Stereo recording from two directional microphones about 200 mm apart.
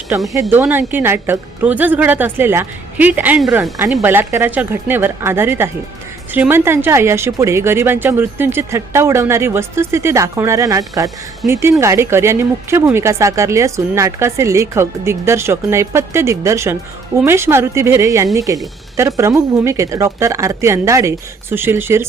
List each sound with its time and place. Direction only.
0.1 s speech: 10° right (ahead or behind)